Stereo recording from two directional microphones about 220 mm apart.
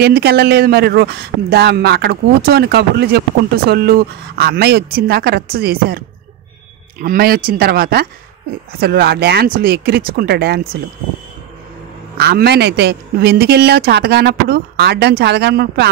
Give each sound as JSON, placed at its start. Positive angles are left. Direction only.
{"t": 0.0, "sound": "speech", "side_deg": -45}
{"t": 12.2, "sound": "speech", "side_deg": -45}